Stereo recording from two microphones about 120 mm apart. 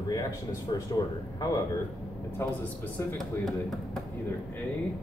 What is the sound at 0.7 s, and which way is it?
Speech, 40° left (ahead or behind).